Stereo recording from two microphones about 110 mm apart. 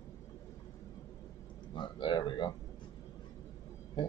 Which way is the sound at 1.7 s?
45° left (ahead or behind).